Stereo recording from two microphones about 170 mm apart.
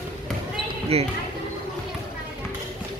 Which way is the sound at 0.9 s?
35° right (ahead or behind).